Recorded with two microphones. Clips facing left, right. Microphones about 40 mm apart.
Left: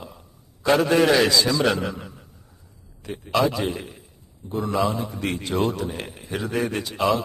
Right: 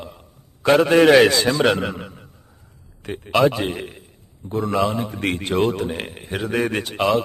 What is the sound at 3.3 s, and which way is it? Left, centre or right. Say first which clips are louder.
Speech: right 4 dB; right.